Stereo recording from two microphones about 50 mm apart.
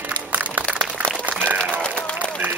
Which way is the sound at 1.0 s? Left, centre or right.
Right.